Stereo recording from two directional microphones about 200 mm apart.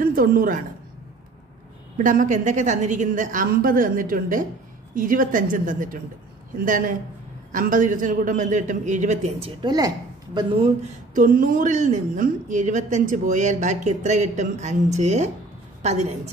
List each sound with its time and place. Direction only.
0.0 s a woman's voice: 45° right (ahead or behind)
2.0 s a woman's voice: 40° right (ahead or behind)
9.6 s a woman's voice: 20° right (ahead or behind)